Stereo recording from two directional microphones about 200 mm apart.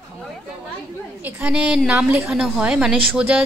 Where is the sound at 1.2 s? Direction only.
5° right (ahead or behind).